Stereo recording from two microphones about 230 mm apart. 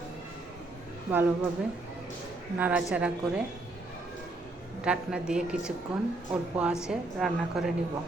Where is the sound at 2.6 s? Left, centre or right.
Centre.